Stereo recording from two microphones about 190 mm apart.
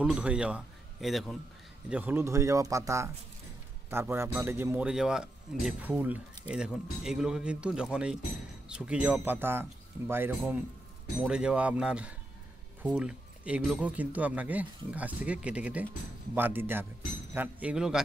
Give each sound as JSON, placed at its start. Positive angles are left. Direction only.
{"t": 0.0, "sound": "a man's voice", "side_deg": -5}